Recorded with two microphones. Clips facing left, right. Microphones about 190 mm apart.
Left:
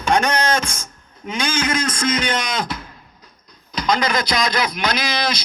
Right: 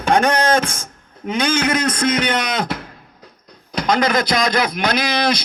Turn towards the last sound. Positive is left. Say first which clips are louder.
# right 4 dB
turn(degrees=-55)  # may be behind; listen again after turning